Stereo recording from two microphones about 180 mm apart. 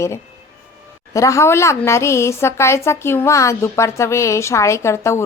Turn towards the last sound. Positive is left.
turn(degrees=15)  # may be behind; listen again after turning